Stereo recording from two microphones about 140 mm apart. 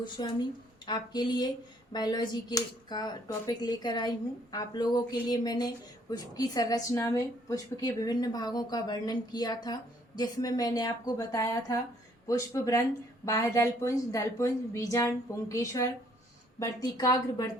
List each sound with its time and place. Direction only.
0.2 s speech: 35° left (ahead or behind)